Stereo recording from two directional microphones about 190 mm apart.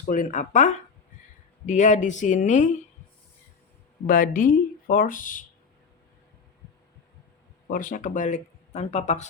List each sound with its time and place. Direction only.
0.1 s speech: 40° left (ahead or behind)
4.0 s speech: 45° left (ahead or behind)
7.7 s speech: 45° left (ahead or behind)